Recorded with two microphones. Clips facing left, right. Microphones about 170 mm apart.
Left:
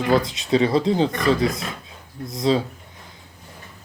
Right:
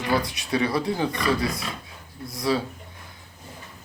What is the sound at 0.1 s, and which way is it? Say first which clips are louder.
Speech: left 5 dB; 20° left (ahead or behind).